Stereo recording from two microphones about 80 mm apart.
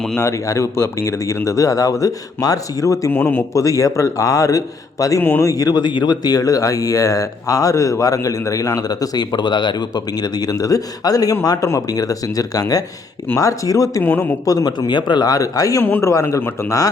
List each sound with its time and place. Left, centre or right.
0.2 s speech: left
3.1 s speech: left
3.5 s speech: left
14.0 s speech: left
14.4 s speech: left
15.8 s speech: left